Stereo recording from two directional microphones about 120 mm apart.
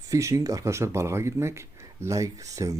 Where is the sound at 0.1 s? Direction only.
25° right (ahead or behind).